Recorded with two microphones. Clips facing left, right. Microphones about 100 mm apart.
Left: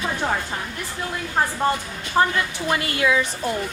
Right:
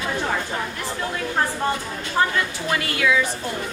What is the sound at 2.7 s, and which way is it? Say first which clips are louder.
Speech: left 1 dB; 25° left (ahead or behind).